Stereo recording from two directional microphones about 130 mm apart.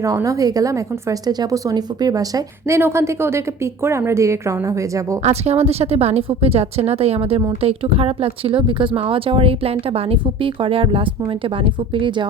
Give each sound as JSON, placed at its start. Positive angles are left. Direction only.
{"t": 0.0, "sound": "a woman's voice", "side_deg": -25}
{"t": 5.2, "sound": "speech", "side_deg": -55}